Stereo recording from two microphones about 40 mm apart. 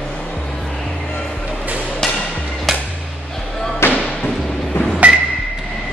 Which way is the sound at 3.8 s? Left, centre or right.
Left.